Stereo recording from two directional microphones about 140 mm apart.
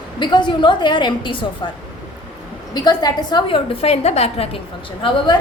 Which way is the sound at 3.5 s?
45° left (ahead or behind).